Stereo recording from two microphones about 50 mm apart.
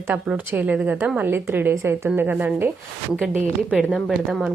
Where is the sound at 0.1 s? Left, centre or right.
Right.